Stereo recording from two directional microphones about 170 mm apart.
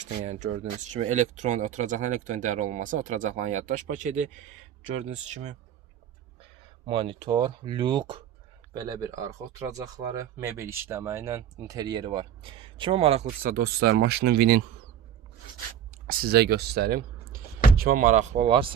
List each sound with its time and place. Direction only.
0.0 s speech: 45° right (ahead or behind)
6.8 s speech: 30° right (ahead or behind)
13.4 s speech: 65° right (ahead or behind)
16.0 s speech: 65° right (ahead or behind)
17.7 s speech: 55° right (ahead or behind)
18.4 s speech: 30° right (ahead or behind)